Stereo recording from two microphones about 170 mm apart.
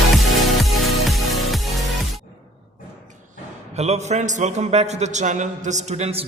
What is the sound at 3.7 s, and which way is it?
A man's voice, 40° right (ahead or behind).